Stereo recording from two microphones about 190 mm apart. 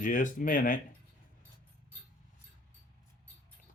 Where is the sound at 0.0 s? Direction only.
45° left (ahead or behind).